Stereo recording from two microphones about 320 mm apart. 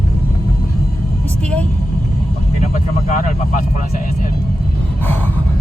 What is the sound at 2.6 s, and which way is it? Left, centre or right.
Speech, left.